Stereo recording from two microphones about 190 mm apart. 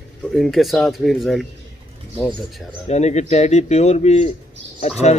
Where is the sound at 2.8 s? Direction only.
35° left (ahead or behind).